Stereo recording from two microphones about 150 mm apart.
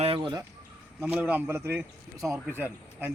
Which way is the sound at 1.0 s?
10° right (ahead or behind).